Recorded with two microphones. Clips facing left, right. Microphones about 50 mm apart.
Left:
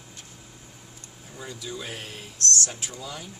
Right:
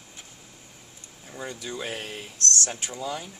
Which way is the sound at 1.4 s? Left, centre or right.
Right.